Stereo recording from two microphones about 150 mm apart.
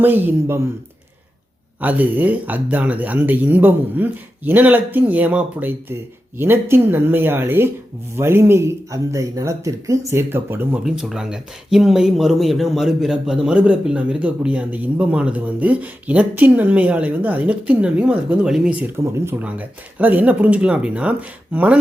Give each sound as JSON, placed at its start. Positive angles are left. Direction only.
{"t": 0.0, "sound": "speech", "side_deg": -15}
{"t": 1.8, "sound": "speech", "side_deg": -10}
{"t": 10.8, "sound": "speech", "side_deg": -5}
{"t": 19.0, "sound": "speech", "side_deg": -15}